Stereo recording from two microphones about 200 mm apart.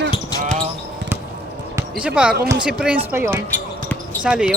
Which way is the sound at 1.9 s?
5° right (ahead or behind).